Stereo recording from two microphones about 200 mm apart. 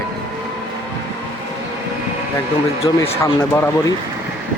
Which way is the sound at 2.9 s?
20° left (ahead or behind).